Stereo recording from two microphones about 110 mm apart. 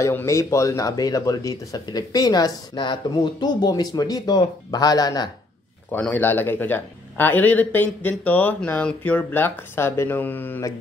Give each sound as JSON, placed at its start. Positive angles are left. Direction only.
{"t": 0.0, "sound": "speech", "side_deg": 25}
{"t": 5.9, "sound": "a man's voice", "side_deg": 15}